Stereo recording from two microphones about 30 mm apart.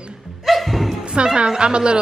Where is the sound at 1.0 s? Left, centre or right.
Right.